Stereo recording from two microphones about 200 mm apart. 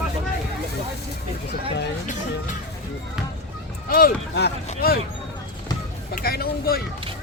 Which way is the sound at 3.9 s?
50° left (ahead or behind).